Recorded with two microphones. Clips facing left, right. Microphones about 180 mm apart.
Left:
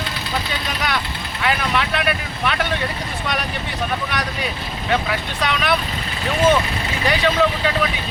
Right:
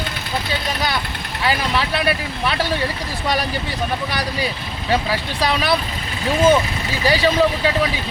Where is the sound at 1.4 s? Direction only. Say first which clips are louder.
Even; 30° right (ahead or behind).